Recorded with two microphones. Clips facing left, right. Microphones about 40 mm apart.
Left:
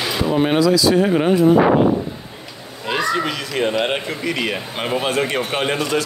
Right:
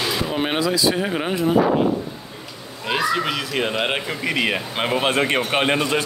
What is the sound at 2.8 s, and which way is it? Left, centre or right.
Speech, centre.